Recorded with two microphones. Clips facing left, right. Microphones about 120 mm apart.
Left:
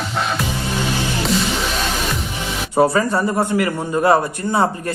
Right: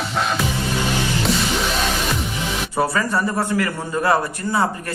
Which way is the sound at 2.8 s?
20° left (ahead or behind).